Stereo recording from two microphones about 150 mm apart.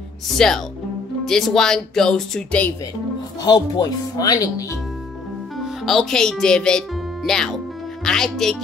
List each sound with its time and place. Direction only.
0.4 s speech: 5° left (ahead or behind)
3.4 s speech: 30° left (ahead or behind)
5.9 s speech: centre (ahead or behind)